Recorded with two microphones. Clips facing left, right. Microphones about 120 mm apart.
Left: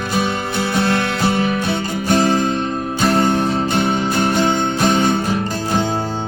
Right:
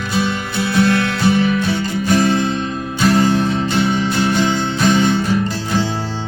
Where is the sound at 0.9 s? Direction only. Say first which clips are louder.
Right 2 dB; 20° left (ahead or behind).